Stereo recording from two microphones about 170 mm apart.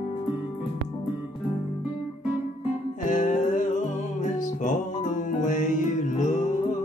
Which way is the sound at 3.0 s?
45° left (ahead or behind).